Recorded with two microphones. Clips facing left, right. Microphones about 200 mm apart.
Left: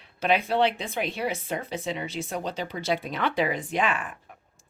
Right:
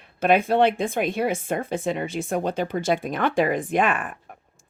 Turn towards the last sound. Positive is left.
turn(degrees=-55)  # may be behind; listen again after turning